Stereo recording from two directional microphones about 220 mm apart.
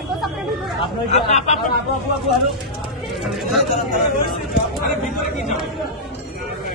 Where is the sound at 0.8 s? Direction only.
30° left (ahead or behind).